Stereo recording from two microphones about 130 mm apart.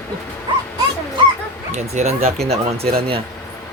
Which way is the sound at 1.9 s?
55° right (ahead or behind).